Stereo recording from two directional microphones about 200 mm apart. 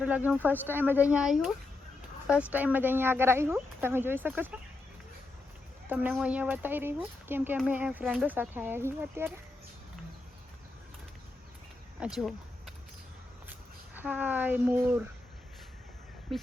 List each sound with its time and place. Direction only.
0.0 s speech: 5° right (ahead or behind)
5.9 s speech: 10° right (ahead or behind)
11.9 s a sound: 5° right (ahead or behind)
13.5 s speech: 10° right (ahead or behind)